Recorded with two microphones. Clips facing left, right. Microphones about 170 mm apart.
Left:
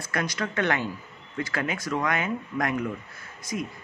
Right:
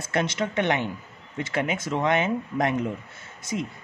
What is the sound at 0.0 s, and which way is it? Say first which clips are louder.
Speech: right 4 dB; 25° right (ahead or behind).